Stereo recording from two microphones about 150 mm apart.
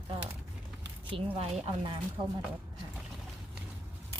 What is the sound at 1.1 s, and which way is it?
Speech, 40° right (ahead or behind).